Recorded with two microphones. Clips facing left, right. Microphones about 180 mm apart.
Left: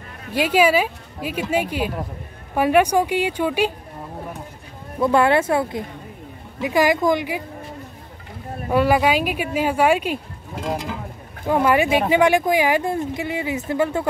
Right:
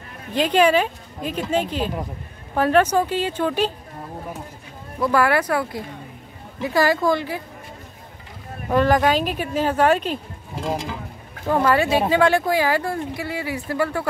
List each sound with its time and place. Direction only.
0.3 s speech: 10° left (ahead or behind)
5.0 s speech: 25° left (ahead or behind)
8.6 s speech: 10° left (ahead or behind)
10.6 s a sound: centre (ahead or behind)
11.4 s speech: 15° left (ahead or behind)